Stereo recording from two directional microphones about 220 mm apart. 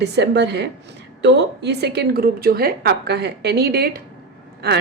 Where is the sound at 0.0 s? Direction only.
50° right (ahead or behind).